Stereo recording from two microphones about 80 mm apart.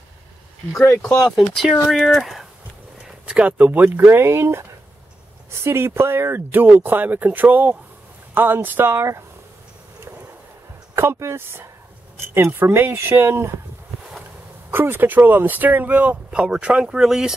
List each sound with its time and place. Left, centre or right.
1.0 s speech: centre
3.0 s speech: centre; by 9.2 s right
11.0 s speech: right
14.7 s speech: right
16.3 s speech: centre